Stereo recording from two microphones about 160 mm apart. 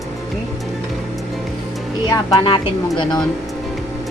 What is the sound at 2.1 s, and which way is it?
Speech, 30° left (ahead or behind).